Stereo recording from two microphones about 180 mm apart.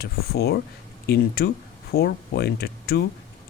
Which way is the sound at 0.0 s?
60° left (ahead or behind).